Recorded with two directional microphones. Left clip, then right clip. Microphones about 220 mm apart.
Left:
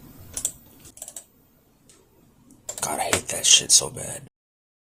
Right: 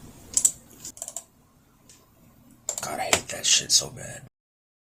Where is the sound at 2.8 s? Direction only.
25° left (ahead or behind).